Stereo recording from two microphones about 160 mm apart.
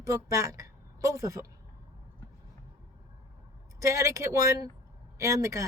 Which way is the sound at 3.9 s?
20° right (ahead or behind).